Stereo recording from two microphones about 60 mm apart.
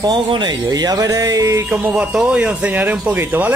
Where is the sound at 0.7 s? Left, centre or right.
Right.